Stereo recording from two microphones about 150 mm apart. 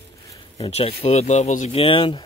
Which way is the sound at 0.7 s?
45° left (ahead or behind).